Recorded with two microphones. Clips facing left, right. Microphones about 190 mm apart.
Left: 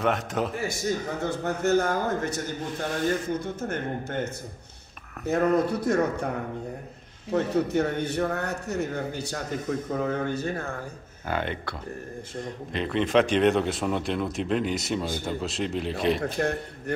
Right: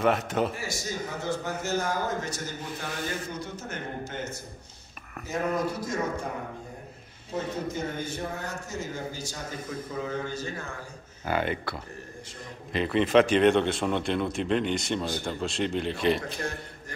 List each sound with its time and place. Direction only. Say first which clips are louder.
0.0 s speech: right 1 dB; centre (ahead or behind)
1.2 s a man's voice: left 5 dB; 60° left (ahead or behind)
7.2 s a man's voice: left 7 dB; 70° left (ahead or behind)
11.2 s speech: right 1 dB; 5° right (ahead or behind)
12.7 s speech: right 1 dB; 5° right (ahead or behind)
16.3 s a man's voice: left 7 dB; 60° left (ahead or behind)